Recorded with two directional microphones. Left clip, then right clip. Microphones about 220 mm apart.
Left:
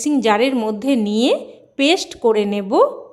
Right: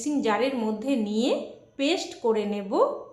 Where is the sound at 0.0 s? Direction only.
45° left (ahead or behind).